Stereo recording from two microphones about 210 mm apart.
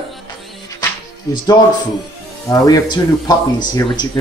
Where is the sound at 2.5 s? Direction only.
20° left (ahead or behind).